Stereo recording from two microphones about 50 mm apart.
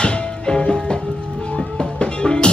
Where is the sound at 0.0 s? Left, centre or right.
Centre.